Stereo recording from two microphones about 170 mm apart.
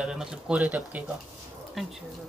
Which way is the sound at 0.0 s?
5° right (ahead or behind).